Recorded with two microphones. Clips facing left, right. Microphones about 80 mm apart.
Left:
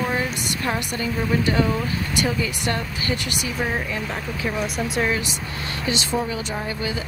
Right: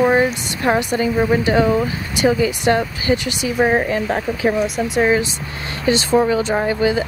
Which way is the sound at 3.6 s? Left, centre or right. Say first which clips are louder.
Right 11 dB; right.